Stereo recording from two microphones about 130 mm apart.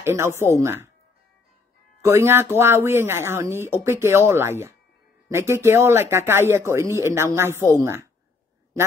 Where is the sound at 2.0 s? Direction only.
20° right (ahead or behind).